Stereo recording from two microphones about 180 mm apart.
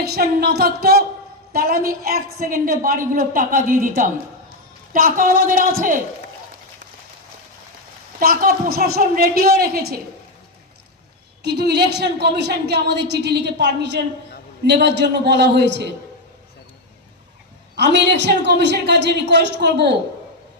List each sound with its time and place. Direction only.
0.0 s a woman's voice: 60° right (ahead or behind)
8.2 s speech: 55° right (ahead or behind)
11.4 s a woman's voice: 65° right (ahead or behind)
17.7 s a woman's voice: 75° right (ahead or behind)